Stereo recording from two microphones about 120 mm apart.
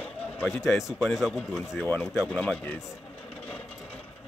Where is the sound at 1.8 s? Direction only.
15° left (ahead or behind).